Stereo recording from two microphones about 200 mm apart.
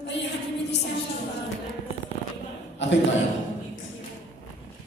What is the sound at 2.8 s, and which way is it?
Chuckle, 60° left (ahead or behind).